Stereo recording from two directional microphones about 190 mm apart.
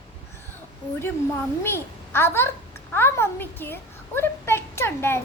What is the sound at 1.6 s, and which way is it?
A child's voice, 10° left (ahead or behind).